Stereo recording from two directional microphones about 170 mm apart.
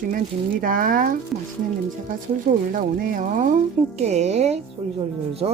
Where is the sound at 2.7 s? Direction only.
50° right (ahead or behind).